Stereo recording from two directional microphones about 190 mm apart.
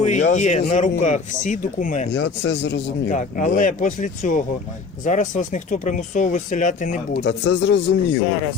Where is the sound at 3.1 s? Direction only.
40° left (ahead or behind).